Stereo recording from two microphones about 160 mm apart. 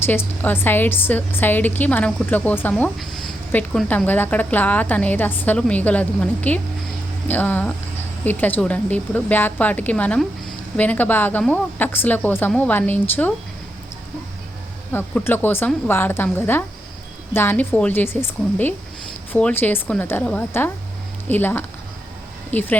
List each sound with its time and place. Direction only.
0.4 s a woman's voice: 15° left (ahead or behind)
3.0 s a sound: centre (ahead or behind)
3.5 s a woman's voice: 5° left (ahead or behind)
14.9 s a woman's voice: 10° left (ahead or behind)